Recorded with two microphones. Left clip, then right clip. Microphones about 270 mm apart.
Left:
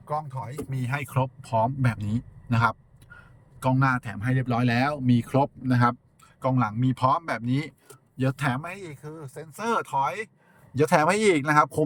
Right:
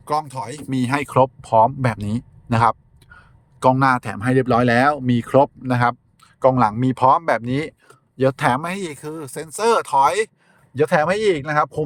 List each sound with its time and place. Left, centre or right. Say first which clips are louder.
0.8 s speech: right 13 dB; right
9.6 s speech: right 10 dB; centre
10.8 s speech: right 4 dB; centre